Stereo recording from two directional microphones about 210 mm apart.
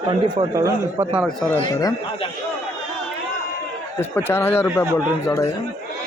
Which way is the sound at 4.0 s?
10° left (ahead or behind).